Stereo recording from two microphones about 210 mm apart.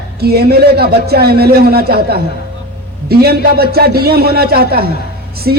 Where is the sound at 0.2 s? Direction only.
50° right (ahead or behind).